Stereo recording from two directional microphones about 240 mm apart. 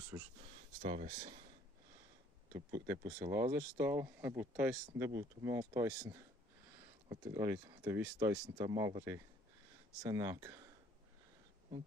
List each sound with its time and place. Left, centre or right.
0.1 s speech: centre
0.8 s speech: right
2.5 s speech: centre